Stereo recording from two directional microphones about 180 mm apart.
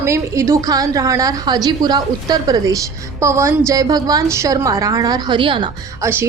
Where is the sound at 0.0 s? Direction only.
15° right (ahead or behind).